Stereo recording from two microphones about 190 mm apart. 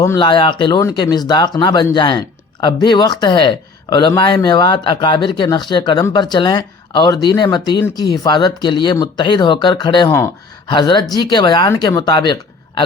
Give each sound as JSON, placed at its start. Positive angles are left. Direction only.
{"t": 0.0, "sound": "speech", "side_deg": 20}